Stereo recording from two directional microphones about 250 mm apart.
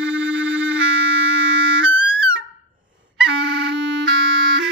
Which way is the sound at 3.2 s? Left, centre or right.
Right.